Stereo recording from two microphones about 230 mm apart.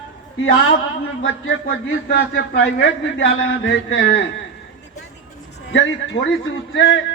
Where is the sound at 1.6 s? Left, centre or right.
Left.